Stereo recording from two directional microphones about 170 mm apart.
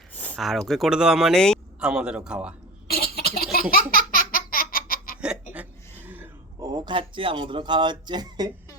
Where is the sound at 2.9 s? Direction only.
65° left (ahead or behind).